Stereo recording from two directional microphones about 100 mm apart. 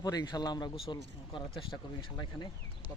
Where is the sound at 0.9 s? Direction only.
60° left (ahead or behind).